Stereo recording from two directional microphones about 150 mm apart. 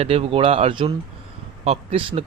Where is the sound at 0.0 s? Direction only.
40° right (ahead or behind).